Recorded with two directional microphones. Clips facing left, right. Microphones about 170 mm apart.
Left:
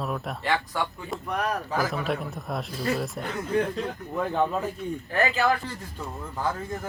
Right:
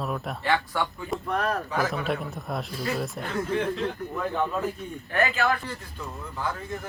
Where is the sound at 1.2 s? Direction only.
15° left (ahead or behind).